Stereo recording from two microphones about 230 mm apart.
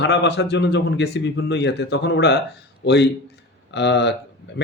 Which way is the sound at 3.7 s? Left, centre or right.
Left.